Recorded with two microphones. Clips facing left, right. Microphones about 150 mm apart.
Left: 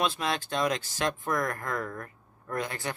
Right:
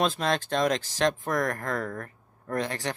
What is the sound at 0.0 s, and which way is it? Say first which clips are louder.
Speech: right 3 dB; 40° right (ahead or behind).